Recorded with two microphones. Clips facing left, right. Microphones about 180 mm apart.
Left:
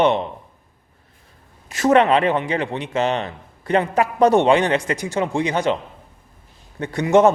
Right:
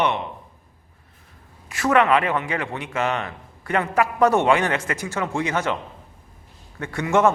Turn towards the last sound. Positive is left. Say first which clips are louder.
# left 5 dB
turn(degrees=20)  # may be behind; listen again after turning